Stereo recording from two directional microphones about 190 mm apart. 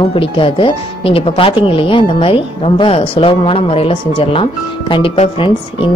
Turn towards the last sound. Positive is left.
turn(degrees=25)  # may be behind; listen again after turning